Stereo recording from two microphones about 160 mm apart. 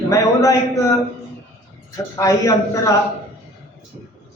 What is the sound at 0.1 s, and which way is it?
Speech, 20° left (ahead or behind).